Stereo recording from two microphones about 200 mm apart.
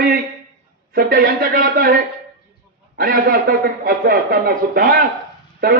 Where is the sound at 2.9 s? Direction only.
50° right (ahead or behind).